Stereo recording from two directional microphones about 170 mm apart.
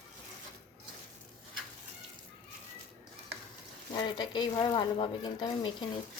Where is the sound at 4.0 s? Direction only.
25° left (ahead or behind).